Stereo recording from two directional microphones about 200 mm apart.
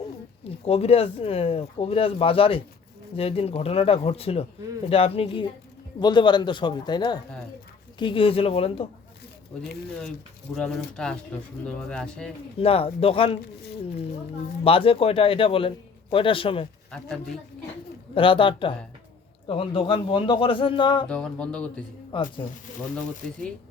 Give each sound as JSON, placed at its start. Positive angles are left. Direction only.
{"t": 0.6, "sound": "speech", "side_deg": 30}
{"t": 9.5, "sound": "speech", "side_deg": 5}
{"t": 12.5, "sound": "speech", "side_deg": 30}
{"t": 14.6, "sound": "speech", "side_deg": 30}
{"t": 16.9, "sound": "speech", "side_deg": 5}
{"t": 18.1, "sound": "speech", "side_deg": 25}
{"t": 21.1, "sound": "speech", "side_deg": 5}
{"t": 22.1, "sound": "speech", "side_deg": 25}